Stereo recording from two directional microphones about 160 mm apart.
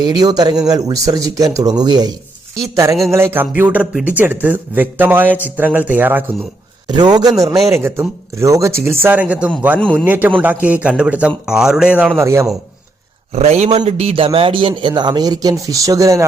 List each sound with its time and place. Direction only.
0.0 s a man's voice: 25° right (ahead or behind)
6.8 s a man's voice: 25° right (ahead or behind)
13.3 s speech: 40° right (ahead or behind); by 16.2 s 20° right (ahead or behind)